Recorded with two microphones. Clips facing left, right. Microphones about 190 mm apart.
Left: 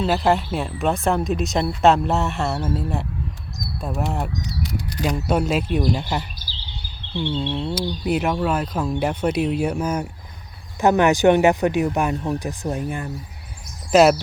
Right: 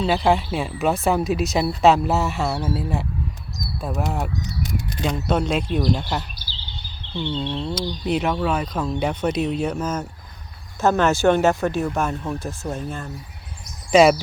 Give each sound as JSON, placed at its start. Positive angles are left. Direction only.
{"t": 0.0, "sound": "speech", "side_deg": 0}
{"t": 13.9, "sound": "speech", "side_deg": 0}